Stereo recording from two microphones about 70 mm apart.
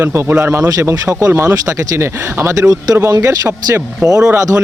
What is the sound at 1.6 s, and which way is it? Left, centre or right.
Speech, right.